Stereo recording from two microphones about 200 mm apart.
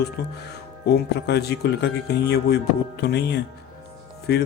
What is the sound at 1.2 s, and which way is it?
A man's voice, 55° left (ahead or behind).